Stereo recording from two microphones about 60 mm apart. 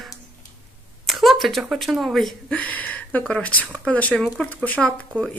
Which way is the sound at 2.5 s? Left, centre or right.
Left.